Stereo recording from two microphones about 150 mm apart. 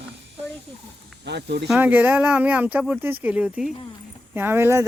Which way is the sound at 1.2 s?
90° right.